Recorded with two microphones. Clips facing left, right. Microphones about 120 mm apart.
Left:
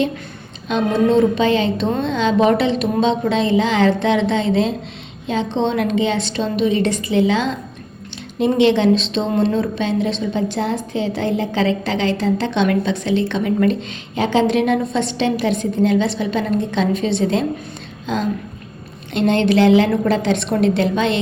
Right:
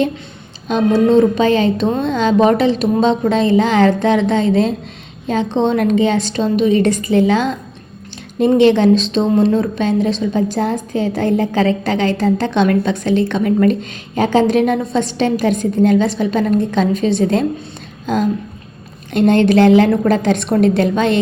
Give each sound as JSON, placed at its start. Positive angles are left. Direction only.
{"t": 1.4, "sound": "a woman's voice", "side_deg": -40}